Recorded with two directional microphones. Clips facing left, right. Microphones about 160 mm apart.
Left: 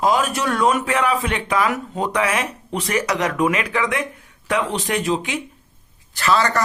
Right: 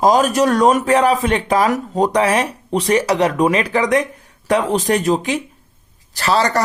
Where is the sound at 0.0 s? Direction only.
40° right (ahead or behind).